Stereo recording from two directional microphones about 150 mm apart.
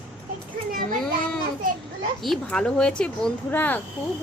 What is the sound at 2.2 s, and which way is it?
Speech, 5° left (ahead or behind).